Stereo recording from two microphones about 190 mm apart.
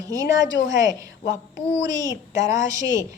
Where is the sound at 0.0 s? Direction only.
20° right (ahead or behind).